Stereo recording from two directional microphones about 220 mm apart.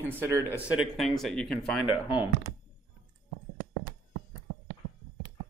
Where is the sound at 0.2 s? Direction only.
15° right (ahead or behind).